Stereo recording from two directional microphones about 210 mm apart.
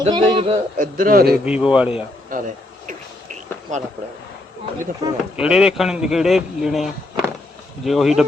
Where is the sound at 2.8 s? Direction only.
35° right (ahead or behind).